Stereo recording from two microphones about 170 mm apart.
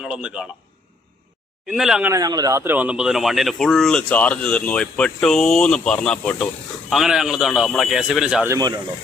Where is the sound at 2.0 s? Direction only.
20° right (ahead or behind); by 8.4 s 5° right (ahead or behind).